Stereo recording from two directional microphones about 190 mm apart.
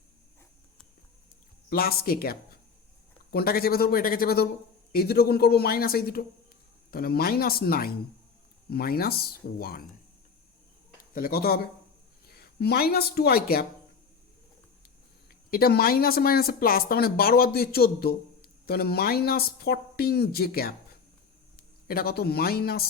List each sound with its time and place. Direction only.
1.7 s a woman's voice: 55° left (ahead or behind)
11.1 s a woman's voice: 50° left (ahead or behind)
15.3 s a woman's voice: 50° left (ahead or behind)